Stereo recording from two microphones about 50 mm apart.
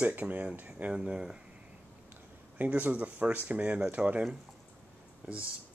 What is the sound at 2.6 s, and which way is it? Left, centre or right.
Speech, right.